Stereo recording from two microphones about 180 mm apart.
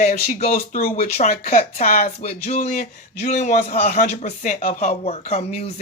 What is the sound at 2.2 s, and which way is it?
A man's voice, 40° left (ahead or behind).